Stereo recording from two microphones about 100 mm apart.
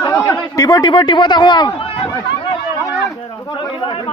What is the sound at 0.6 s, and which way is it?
A man's voice, 40° left (ahead or behind).